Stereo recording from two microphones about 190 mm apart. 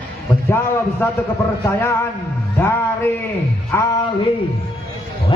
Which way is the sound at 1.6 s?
15° left (ahead or behind).